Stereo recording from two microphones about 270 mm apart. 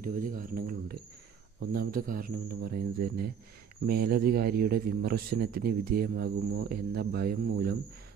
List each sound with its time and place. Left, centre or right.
0.0 s speech: right